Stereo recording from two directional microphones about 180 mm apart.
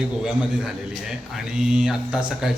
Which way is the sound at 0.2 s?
Centre (ahead or behind).